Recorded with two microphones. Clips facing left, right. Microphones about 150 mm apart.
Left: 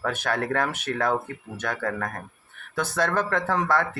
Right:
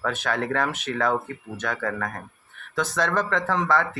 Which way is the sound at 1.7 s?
40° left (ahead or behind).